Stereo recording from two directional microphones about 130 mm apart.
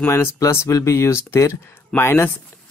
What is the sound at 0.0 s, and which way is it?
Speech, 20° left (ahead or behind).